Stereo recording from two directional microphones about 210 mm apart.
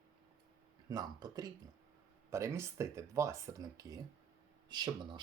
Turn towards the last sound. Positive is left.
turn(degrees=-20)  # may be behind; listen again after turning